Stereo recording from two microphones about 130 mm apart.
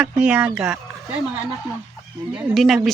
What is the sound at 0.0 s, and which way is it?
Speech, 10° right (ahead or behind).